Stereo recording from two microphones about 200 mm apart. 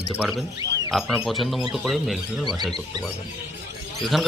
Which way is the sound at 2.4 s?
20° right (ahead or behind).